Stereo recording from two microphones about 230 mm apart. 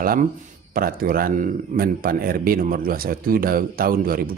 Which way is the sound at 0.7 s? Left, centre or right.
Right.